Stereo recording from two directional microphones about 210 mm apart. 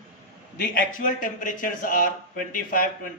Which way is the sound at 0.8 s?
40° left (ahead or behind).